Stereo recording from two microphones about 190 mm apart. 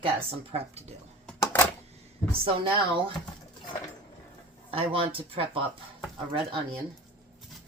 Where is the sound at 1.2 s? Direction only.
10° left (ahead or behind).